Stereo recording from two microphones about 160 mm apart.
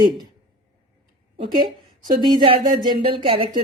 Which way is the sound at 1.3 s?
35° right (ahead or behind).